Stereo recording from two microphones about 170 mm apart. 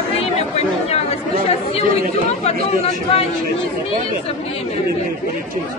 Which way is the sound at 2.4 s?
40° left (ahead or behind).